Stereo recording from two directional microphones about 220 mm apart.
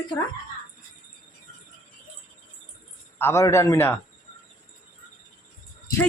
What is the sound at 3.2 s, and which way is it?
Speech, 10° left (ahead or behind).